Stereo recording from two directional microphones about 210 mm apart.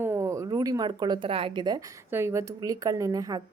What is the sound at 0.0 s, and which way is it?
Speech, 10° right (ahead or behind).